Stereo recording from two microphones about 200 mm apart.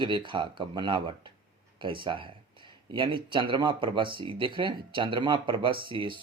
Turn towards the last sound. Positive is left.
turn(degrees=-25)  # may be behind; listen again after turning